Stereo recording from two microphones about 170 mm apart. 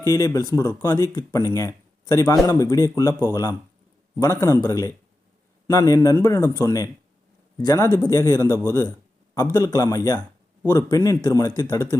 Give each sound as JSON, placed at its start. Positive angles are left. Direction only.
{"t": 0.0, "sound": "speech", "side_deg": 20}